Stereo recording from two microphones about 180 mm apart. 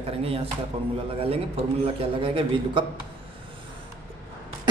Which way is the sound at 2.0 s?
30° right (ahead or behind).